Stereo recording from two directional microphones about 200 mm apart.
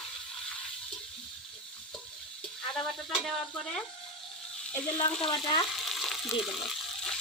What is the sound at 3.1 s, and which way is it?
Speech, 5° left (ahead or behind).